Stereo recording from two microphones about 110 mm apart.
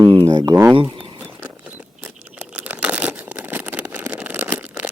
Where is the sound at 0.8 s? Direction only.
45° right (ahead or behind).